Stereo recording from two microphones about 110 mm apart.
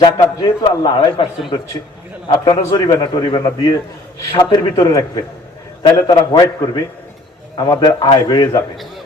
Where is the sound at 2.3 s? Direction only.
50° left (ahead or behind).